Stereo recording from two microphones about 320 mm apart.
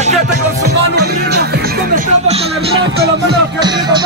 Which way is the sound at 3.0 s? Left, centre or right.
Right.